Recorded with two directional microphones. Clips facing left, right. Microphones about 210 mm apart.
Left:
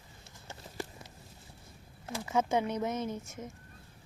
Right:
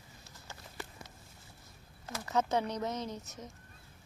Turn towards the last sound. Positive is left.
turn(degrees=10)  # may be behind; listen again after turning